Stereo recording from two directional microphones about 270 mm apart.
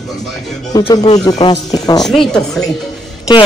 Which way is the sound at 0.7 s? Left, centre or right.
Centre.